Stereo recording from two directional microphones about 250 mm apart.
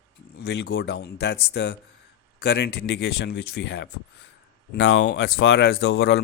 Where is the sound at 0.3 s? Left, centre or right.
Left.